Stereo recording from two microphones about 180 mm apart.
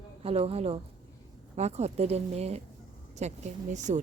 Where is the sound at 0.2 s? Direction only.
35° right (ahead or behind).